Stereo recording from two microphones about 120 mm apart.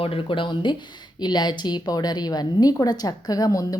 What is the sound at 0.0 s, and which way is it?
Speech, 50° left (ahead or behind).